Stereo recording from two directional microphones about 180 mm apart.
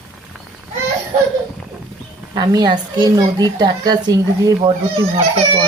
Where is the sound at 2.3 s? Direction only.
25° right (ahead or behind).